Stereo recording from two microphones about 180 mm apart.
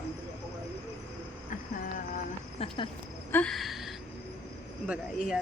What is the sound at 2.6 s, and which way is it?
Cricket, 30° left (ahead or behind).